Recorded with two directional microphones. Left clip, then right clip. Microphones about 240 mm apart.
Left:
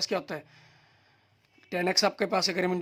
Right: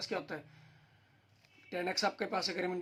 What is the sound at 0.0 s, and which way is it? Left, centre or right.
Speech, left.